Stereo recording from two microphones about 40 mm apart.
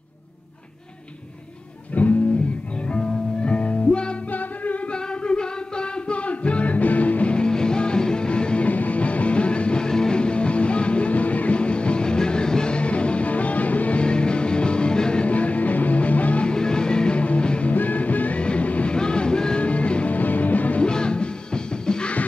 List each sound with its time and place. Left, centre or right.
1.9 s music: left
2.9 s music: left
5.2 s music: left
8.6 s music: left
15.2 s music: left
16.4 s music: left
17.7 s music: left
18.9 s music: left
19.6 s music: left
20.2 s music: left
20.8 s music: left